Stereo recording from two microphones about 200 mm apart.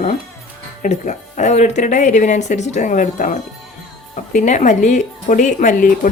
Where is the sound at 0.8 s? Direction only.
40° left (ahead or behind).